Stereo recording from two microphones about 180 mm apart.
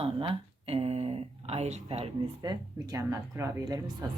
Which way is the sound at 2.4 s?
20° right (ahead or behind).